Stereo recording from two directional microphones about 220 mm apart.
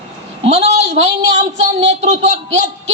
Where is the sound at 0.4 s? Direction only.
30° right (ahead or behind).